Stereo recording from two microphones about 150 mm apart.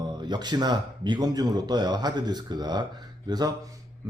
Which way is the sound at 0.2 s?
30° right (ahead or behind).